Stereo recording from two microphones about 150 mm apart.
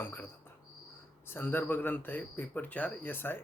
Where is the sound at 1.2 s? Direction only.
15° left (ahead or behind).